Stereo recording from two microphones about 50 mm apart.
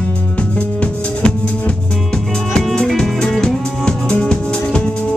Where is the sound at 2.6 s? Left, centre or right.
Centre.